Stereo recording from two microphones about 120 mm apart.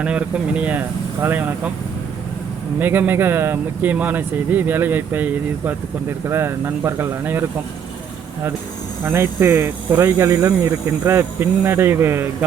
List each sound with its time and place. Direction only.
0.0 s speech: 10° right (ahead or behind)
2.7 s speech: 15° right (ahead or behind)
9.0 s speech: 20° right (ahead or behind)